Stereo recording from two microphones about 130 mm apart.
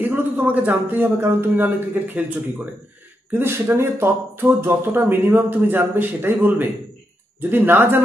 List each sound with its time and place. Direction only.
0.0 s speech: 15° right (ahead or behind)